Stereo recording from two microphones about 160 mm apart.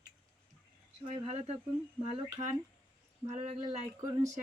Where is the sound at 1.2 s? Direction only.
40° right (ahead or behind).